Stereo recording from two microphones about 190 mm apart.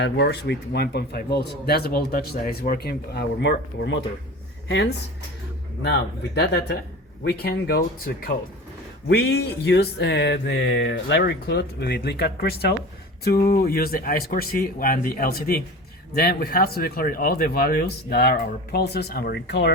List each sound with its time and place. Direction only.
0.0 s speech: 65° left (ahead or behind)
5.8 s speech: 60° left (ahead or behind)